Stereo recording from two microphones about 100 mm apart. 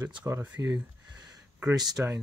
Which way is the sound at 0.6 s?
35° right (ahead or behind).